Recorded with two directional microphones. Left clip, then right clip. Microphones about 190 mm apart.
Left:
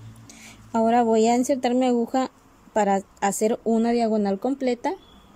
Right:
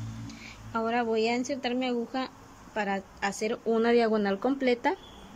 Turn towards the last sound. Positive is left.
turn(degrees=25)  # may be behind; listen again after turning